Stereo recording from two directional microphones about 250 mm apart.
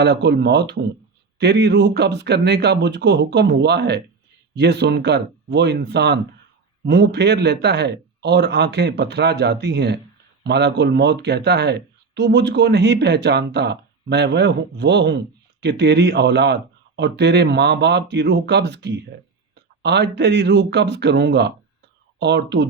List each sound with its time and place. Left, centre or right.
0.0 s speech: right